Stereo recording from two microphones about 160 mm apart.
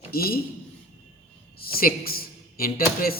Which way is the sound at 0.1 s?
70° left (ahead or behind).